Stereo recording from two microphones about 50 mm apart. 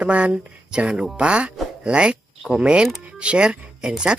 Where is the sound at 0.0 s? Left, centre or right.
Right.